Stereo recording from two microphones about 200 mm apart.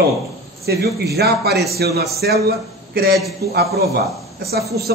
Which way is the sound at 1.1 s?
55° right (ahead or behind).